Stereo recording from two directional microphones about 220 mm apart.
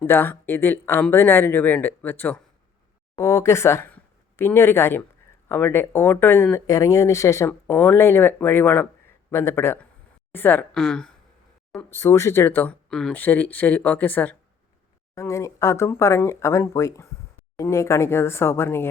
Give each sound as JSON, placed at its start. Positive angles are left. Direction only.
{"t": 0.0, "sound": "a woman's voice", "side_deg": 10}